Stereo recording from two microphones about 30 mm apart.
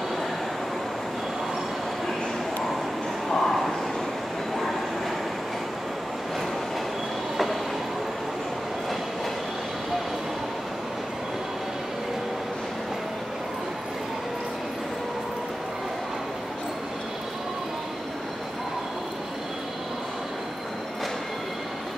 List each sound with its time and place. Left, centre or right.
3.3 s vehicle: centre